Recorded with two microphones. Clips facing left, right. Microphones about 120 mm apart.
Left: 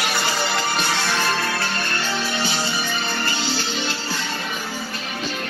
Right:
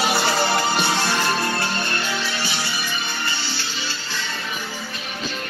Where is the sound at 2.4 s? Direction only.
40° left (ahead or behind).